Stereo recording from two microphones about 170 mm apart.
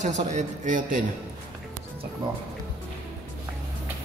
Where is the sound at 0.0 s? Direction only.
45° right (ahead or behind).